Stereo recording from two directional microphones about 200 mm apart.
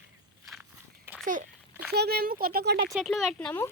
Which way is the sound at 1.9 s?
55° right (ahead or behind).